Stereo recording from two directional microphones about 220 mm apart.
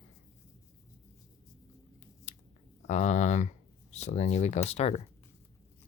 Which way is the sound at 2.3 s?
30° left (ahead or behind).